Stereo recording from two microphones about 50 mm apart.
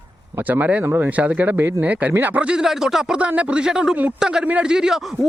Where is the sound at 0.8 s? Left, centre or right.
Right.